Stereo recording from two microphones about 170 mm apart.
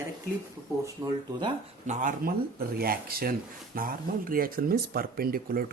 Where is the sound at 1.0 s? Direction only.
20° right (ahead or behind).